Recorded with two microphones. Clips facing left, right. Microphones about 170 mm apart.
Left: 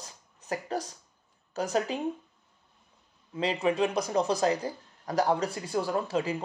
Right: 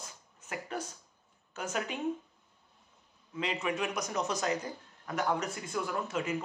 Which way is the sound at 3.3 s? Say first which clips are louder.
Left 7 dB; 30° left (ahead or behind).